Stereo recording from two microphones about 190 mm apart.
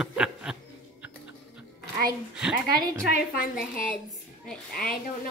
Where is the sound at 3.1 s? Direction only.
45° left (ahead or behind).